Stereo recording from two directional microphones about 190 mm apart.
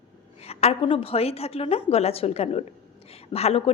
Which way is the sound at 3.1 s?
30° left (ahead or behind).